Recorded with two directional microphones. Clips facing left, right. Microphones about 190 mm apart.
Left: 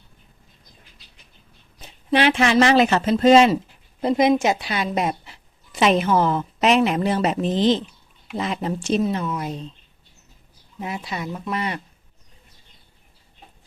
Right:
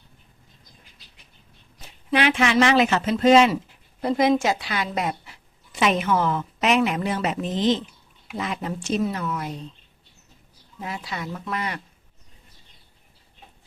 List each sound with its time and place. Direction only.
2.0 s a woman's voice: 30° left (ahead or behind)
4.0 s a woman's voice: 20° left (ahead or behind)
10.8 s a woman's voice: 20° left (ahead or behind)